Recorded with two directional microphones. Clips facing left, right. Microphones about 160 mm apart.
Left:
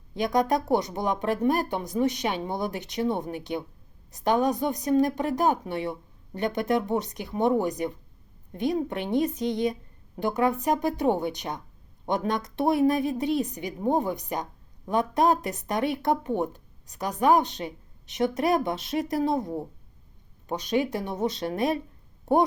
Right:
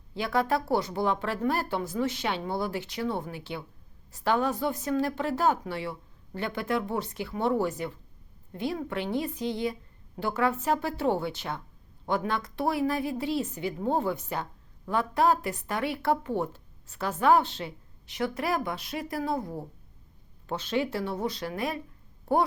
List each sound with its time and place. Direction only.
0.1 s a woman's voice: 15° left (ahead or behind)